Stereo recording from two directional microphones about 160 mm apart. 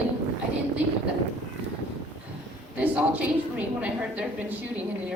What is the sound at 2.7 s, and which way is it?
A woman's voice, 10° right (ahead or behind).